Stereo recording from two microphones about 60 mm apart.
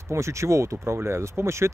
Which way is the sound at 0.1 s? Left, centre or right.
Right.